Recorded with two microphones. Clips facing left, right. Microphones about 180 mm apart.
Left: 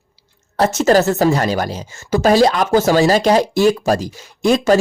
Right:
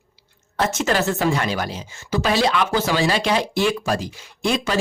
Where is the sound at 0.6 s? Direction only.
40° left (ahead or behind).